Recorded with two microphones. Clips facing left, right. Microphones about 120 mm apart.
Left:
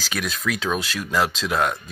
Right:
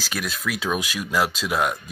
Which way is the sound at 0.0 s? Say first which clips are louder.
Left 2 dB; centre (ahead or behind).